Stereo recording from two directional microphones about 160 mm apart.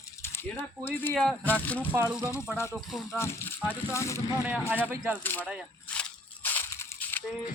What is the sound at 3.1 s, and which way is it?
Speech, 15° left (ahead or behind).